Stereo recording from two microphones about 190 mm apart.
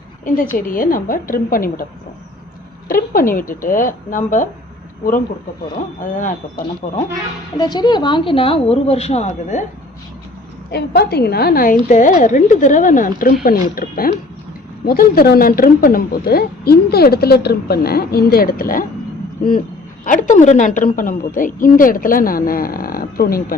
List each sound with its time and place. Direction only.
0.3 s speech: 45° left (ahead or behind)
2.9 s speech: 50° left (ahead or behind)
6.0 s speech: 45° left (ahead or behind)
7.5 s a woman's voice: 20° left (ahead or behind)
10.7 s speech: 60° left (ahead or behind)